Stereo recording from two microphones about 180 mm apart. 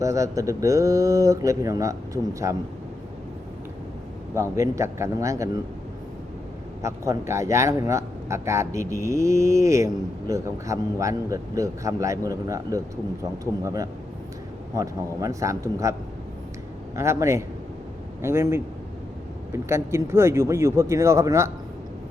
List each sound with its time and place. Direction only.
0.0 s speech: 15° right (ahead or behind)
4.5 s speech: 15° right (ahead or behind)
6.8 s speech: 15° right (ahead or behind)
19.6 s speech: 15° right (ahead or behind)